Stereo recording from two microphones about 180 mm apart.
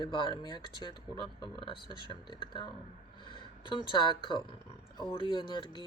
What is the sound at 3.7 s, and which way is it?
Speech, 25° left (ahead or behind).